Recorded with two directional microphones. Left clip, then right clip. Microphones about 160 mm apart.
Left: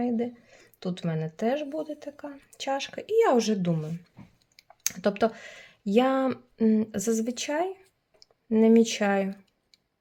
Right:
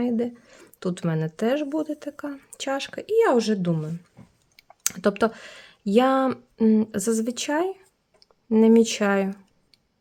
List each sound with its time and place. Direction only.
0.0 s speech: 45° right (ahead or behind); by 3.9 s 25° right (ahead or behind)
4.5 s speech: 40° right (ahead or behind)
8.2 s tick-tock: 30° right (ahead or behind)